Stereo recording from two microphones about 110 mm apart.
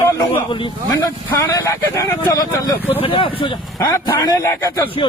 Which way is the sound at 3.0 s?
55° left (ahead or behind).